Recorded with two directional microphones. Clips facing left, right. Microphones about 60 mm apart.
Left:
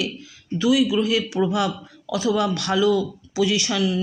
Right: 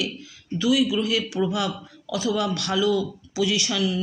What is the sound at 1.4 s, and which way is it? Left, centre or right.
Speech, left.